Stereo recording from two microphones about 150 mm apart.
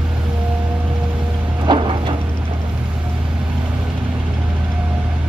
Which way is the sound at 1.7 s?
30° right (ahead or behind).